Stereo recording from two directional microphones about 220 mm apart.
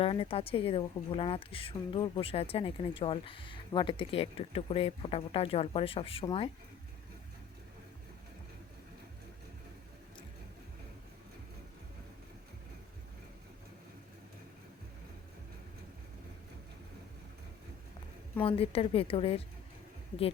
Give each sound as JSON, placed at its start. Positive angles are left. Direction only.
{"t": 0.0, "sound": "a woman's voice", "side_deg": 25}
{"t": 18.3, "sound": "a woman's voice", "side_deg": 25}